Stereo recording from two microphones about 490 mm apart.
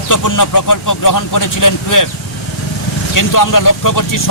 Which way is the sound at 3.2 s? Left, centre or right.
Left.